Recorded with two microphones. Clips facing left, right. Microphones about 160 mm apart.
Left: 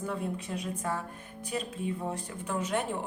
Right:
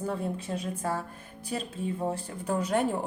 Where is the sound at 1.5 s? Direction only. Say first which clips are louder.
Right 1 dB; 35° right (ahead or behind).